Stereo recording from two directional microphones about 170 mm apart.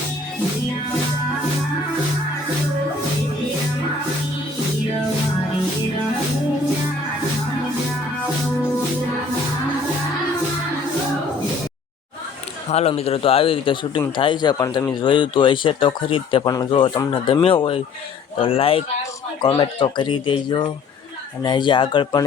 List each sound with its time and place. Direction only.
12.7 s speech: 35° left (ahead or behind)